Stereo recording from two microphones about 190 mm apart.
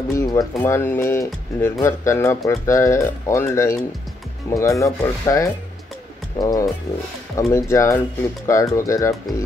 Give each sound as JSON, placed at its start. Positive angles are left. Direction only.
{"t": 0.1, "sound": "speech", "side_deg": 15}